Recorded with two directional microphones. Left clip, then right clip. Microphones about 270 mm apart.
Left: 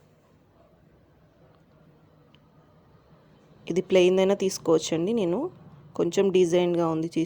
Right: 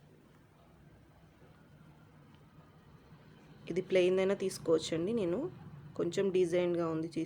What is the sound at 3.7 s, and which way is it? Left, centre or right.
Speech, left.